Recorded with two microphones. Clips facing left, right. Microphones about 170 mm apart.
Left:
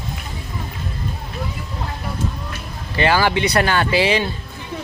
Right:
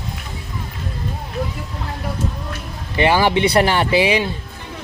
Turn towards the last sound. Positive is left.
turn(degrees=-15)  # may be behind; listen again after turning